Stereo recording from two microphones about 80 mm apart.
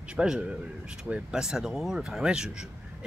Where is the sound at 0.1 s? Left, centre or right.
Centre.